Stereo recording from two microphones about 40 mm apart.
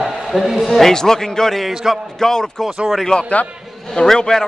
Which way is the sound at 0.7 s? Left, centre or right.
Centre.